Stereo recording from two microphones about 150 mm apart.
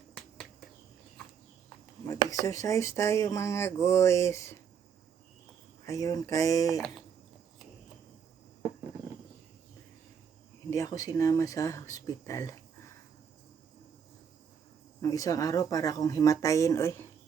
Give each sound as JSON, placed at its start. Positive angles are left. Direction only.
{"t": 2.4, "sound": "speech", "side_deg": 20}
{"t": 5.8, "sound": "speech", "side_deg": 20}
{"t": 10.7, "sound": "speech", "side_deg": 20}
{"t": 15.0, "sound": "speech", "side_deg": 25}